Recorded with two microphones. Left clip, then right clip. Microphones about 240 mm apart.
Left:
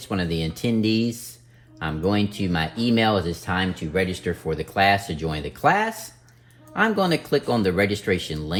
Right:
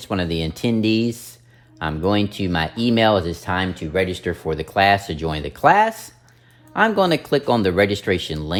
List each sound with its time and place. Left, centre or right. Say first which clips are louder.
0.0 s speech: right 3 dB; right